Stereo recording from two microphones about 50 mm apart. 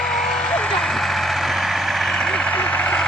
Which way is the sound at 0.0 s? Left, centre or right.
Centre.